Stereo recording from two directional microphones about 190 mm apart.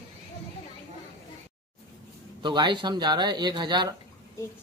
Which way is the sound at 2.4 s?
25° right (ahead or behind).